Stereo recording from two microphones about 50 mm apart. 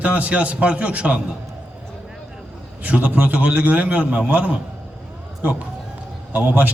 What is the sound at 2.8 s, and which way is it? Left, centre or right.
A man's voice, right.